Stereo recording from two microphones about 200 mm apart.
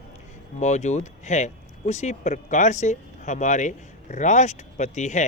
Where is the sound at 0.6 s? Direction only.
35° left (ahead or behind).